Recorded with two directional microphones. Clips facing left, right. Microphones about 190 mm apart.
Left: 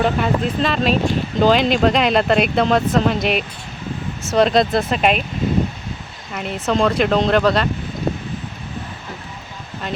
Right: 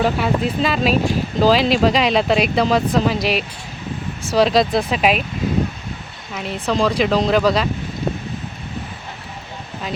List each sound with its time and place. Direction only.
0.0 s speech: 5° right (ahead or behind)
6.3 s speech: centre (ahead or behind)